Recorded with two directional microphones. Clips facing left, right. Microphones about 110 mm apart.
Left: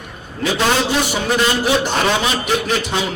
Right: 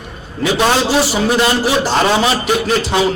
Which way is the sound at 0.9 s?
35° right (ahead or behind).